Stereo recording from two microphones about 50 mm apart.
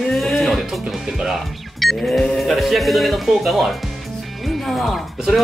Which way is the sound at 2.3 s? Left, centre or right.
Centre.